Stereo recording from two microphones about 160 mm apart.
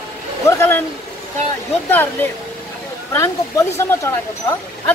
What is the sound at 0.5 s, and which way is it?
Speech, 15° left (ahead or behind).